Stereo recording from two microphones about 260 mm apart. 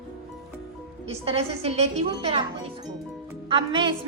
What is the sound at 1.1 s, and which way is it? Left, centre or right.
A woman's voice, right.